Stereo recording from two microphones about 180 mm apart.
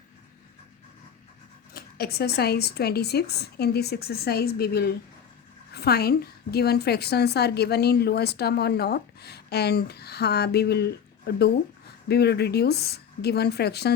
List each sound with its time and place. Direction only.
1.7 s a woman's voice: 60° left (ahead or behind)